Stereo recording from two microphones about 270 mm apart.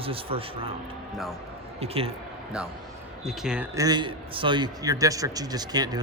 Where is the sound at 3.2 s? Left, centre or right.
Centre.